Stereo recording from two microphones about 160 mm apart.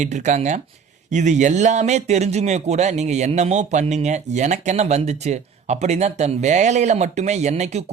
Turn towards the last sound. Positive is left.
turn(degrees=-45)  # may be behind; listen again after turning